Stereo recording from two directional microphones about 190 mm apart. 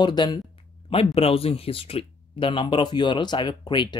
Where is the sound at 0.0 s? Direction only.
25° left (ahead or behind).